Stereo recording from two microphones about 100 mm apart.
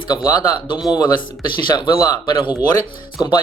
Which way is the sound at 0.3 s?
40° left (ahead or behind).